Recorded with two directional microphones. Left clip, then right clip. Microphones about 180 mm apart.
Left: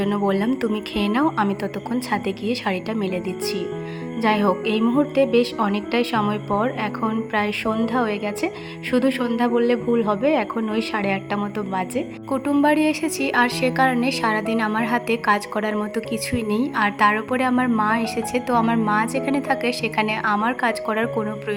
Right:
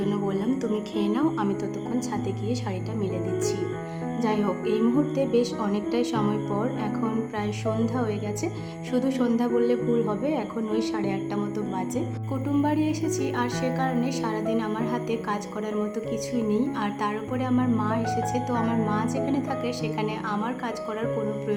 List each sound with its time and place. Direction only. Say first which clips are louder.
0.0 s a woman's voice: left 6 dB; 20° left (ahead or behind)
7.8 s a woman's voice: left 6 dB; 15° left (ahead or behind)